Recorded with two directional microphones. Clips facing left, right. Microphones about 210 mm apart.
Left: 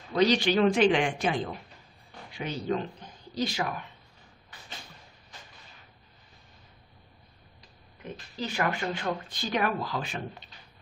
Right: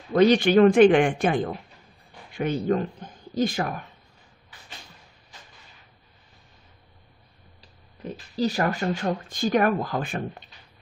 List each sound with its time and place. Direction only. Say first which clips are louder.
0.1 s speech: right 6 dB; 55° right (ahead or behind)
8.0 s speech: right 10 dB; 35° right (ahead or behind)